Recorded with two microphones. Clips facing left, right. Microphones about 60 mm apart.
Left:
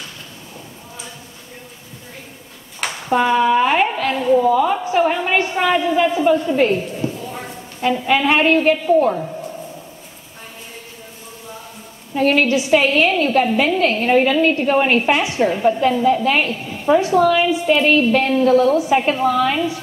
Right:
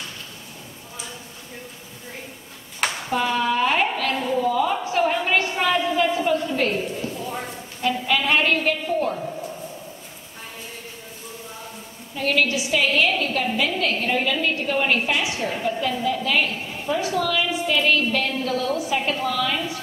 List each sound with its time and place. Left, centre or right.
3.1 s a woman's voice: left
12.2 s a woman's voice: left